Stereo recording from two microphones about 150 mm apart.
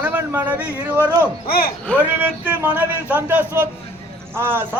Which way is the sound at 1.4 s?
85° left.